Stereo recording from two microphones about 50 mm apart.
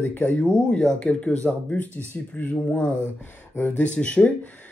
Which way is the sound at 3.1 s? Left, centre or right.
Left.